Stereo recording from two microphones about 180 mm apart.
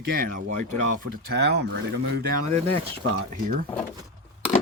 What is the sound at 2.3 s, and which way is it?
Speech, 40° right (ahead or behind).